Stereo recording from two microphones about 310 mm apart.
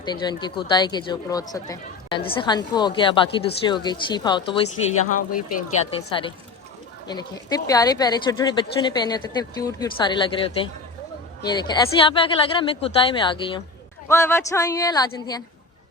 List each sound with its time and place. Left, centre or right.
0.0 s a woman's voice: centre
4.9 s speech: left
6.1 s a woman's voice: centre